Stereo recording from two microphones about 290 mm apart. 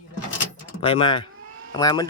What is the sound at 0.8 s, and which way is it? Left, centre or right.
Speech, centre.